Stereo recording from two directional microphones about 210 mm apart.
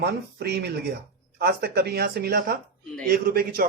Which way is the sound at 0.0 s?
50° right (ahead or behind).